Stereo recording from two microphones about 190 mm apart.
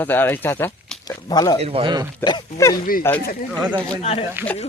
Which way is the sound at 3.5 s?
5° right (ahead or behind).